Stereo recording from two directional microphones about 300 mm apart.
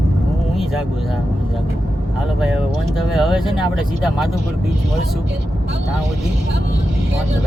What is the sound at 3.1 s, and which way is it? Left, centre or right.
Speech, centre.